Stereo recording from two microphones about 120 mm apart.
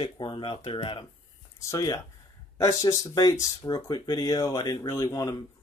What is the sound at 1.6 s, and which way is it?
Speech, 30° left (ahead or behind).